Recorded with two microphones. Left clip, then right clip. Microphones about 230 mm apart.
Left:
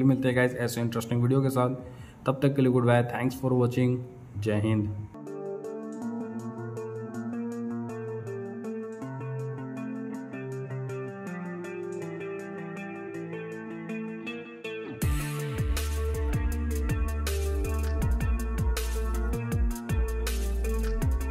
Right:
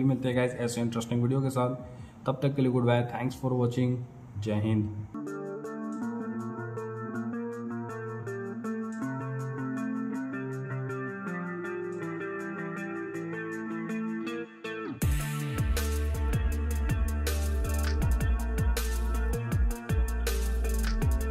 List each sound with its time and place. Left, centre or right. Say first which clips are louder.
0.0 s a man's voice: left 3 dB; centre
7.2 s music: left 1 dB; centre
9.8 s music: right 3 dB; centre
19.3 s music: left 1 dB; centre